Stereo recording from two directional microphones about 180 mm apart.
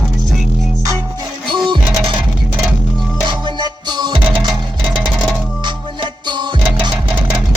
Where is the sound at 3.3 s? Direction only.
25° right (ahead or behind).